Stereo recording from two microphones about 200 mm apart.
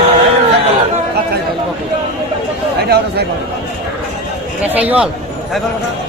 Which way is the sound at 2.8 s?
55° right (ahead or behind).